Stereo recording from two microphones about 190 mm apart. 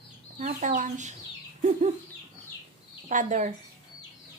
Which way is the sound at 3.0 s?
40° right (ahead or behind).